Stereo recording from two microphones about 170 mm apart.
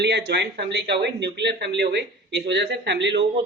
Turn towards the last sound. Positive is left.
turn(degrees=-90)